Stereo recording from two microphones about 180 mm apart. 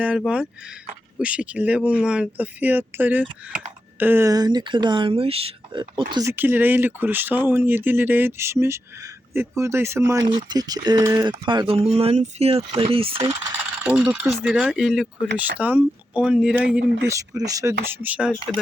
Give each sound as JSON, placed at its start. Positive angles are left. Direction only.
{"t": 0.0, "sound": "speech", "side_deg": -5}
{"t": 6.3, "sound": "speech", "side_deg": -10}
{"t": 13.8, "sound": "speech", "side_deg": -5}
{"t": 16.7, "sound": "speech", "side_deg": -15}